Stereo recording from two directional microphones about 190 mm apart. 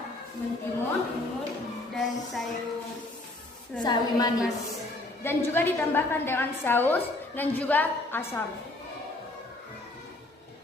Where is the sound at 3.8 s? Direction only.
20° left (ahead or behind).